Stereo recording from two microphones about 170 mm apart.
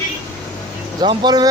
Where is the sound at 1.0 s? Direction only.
25° right (ahead or behind).